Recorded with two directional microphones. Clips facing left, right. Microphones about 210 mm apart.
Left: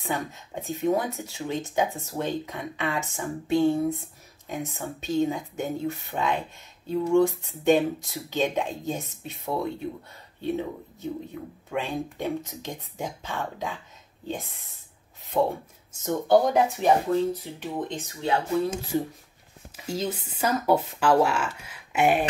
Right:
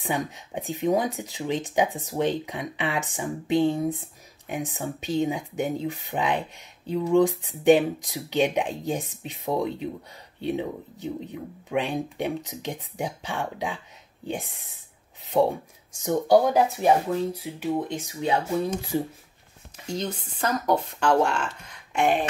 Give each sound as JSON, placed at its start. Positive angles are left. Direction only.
{"t": 0.0, "sound": "speech", "side_deg": -15}
{"t": 15.9, "sound": "speech", "side_deg": -15}
{"t": 19.9, "sound": "speech", "side_deg": 5}